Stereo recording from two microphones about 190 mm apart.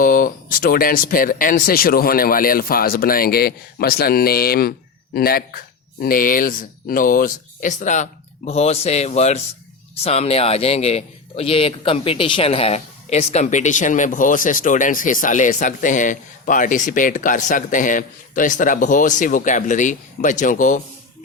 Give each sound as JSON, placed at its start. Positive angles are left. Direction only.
{"t": 0.0, "sound": "speech", "side_deg": 45}